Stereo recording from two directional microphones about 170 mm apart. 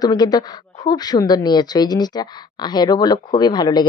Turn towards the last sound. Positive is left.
turn(degrees=25)  # may be behind; listen again after turning